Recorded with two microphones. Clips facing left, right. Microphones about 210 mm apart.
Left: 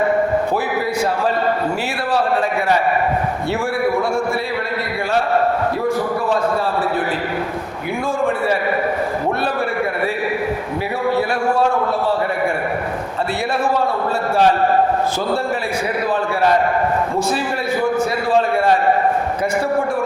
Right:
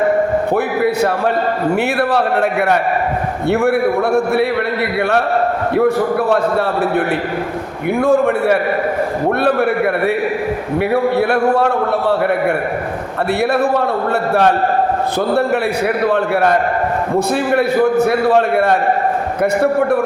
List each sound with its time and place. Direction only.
1.7 s a man's voice: 65° right (ahead or behind)
5.7 s a man's voice: 65° right (ahead or behind)
13.5 s a man's voice: 60° right (ahead or behind)
16.0 s a man's voice: 65° right (ahead or behind)